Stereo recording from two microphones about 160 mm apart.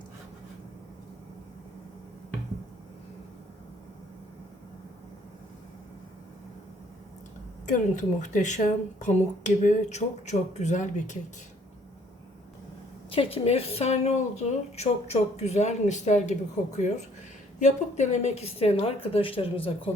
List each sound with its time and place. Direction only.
7.7 s speech: 50° left (ahead or behind)
13.1 s a woman's voice: 35° left (ahead or behind)